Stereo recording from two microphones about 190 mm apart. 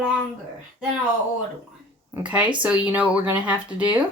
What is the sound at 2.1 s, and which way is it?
Speech, 5° right (ahead or behind).